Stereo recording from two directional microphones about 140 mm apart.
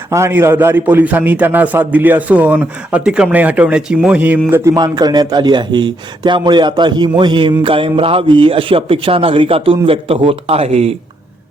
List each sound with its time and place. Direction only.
0.1 s a man's voice: 20° right (ahead or behind)
4.7 s a man's voice: 30° right (ahead or behind); by 10.9 s 50° right (ahead or behind)